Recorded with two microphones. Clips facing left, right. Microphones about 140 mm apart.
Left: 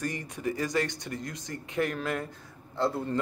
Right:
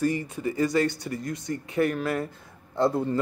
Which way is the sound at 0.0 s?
5° right (ahead or behind).